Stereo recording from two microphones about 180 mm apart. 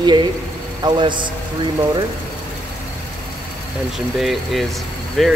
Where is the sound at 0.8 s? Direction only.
25° right (ahead or behind).